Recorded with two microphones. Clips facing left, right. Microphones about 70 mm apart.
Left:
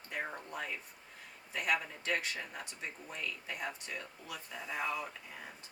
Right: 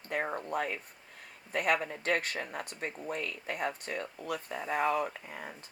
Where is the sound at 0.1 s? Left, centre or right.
Right.